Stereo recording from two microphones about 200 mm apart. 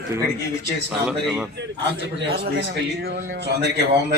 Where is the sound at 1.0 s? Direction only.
5° right (ahead or behind).